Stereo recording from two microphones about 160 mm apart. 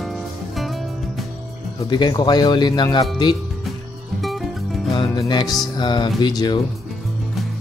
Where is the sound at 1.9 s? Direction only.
25° left (ahead or behind).